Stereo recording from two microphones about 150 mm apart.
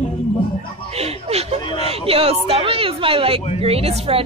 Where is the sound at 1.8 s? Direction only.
40° right (ahead or behind).